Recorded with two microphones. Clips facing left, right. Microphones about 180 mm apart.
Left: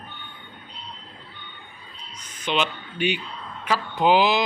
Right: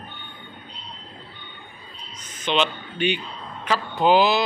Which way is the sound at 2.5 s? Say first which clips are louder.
Right 2 dB; 10° left (ahead or behind).